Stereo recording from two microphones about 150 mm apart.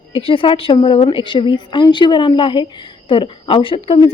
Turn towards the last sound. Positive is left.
turn(degrees=35)  # may be behind; listen again after turning